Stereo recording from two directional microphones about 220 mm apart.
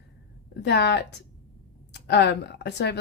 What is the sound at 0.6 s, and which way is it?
Speech, 50° left (ahead or behind).